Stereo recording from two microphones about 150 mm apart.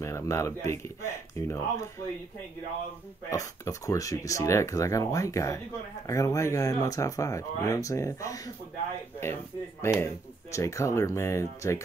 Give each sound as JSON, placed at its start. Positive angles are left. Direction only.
{"t": 0.0, "sound": "speech", "side_deg": 20}
{"t": 3.3, "sound": "speech", "side_deg": 20}